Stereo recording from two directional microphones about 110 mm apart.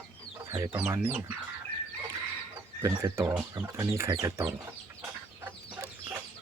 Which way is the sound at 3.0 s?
20° right (ahead or behind).